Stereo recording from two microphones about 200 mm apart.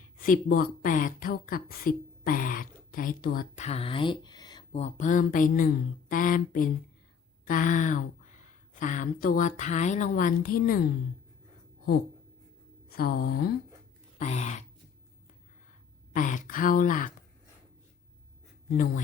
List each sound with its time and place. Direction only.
0.2 s speech: 45° left (ahead or behind); by 4.6 s 20° left (ahead or behind)
4.7 s a woman's voice: 35° left (ahead or behind)
12.9 s a sound: 50° left (ahead or behind)
14.2 s a woman's voice: 35° left (ahead or behind)
16.1 s a woman's voice: 40° left (ahead or behind)